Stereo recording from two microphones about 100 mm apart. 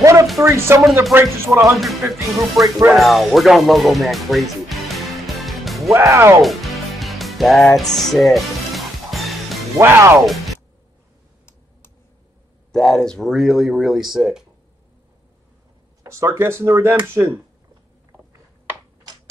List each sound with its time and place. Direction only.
0.0 s music: 30° right (ahead or behind)
0.4 s speech: 25° right (ahead or behind)
1.7 s speech: centre (ahead or behind)
5.9 s speech: 25° right (ahead or behind)
6.4 s music: centre (ahead or behind)
9.8 s speech: 30° right (ahead or behind)
12.7 s speech: 5° left (ahead or behind)
16.0 s speech: 30° right (ahead or behind)